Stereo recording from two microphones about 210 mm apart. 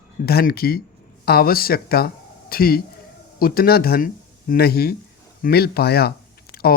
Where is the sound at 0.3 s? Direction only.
45° left (ahead or behind).